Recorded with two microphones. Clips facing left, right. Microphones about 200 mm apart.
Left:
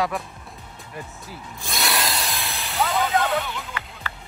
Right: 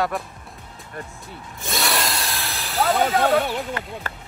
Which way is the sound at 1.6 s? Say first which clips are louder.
Right 2 dB; centre (ahead or behind).